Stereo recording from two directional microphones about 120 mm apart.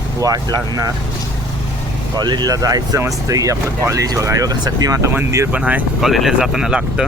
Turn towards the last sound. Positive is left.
turn(degrees=-5)  # may be behind; listen again after turning